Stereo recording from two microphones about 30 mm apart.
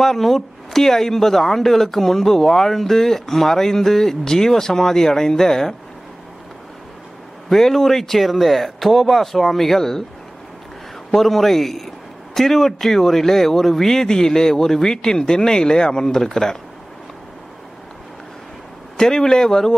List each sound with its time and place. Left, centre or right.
0.0 s speech: centre
7.4 s speech: centre
9.8 s speech: centre
11.1 s speech: centre
14.0 s speech: centre
18.9 s speech: centre